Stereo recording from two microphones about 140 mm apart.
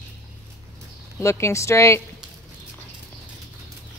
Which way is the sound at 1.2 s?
20° left (ahead or behind).